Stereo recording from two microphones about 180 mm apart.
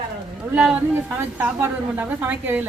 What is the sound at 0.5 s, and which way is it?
A woman's voice, 5° right (ahead or behind).